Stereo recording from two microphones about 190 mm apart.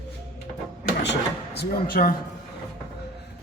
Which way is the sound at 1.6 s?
50° left (ahead or behind).